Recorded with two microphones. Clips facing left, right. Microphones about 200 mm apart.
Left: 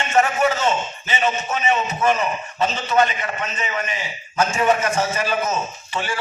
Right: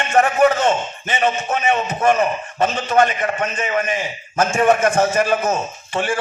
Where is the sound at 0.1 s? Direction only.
55° right (ahead or behind).